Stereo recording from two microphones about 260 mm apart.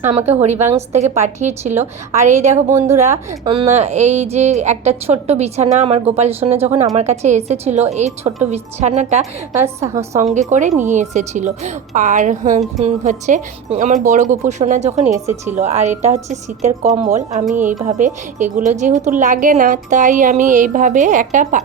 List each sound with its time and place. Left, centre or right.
0.0 s speech: right
10.5 s speech: right
17.6 s a woman's voice: centre
17.8 s speech: right